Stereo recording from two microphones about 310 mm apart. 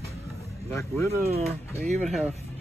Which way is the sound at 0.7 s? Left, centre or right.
Centre.